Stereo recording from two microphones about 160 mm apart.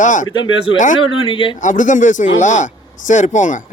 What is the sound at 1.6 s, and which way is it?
Speech, 50° left (ahead or behind).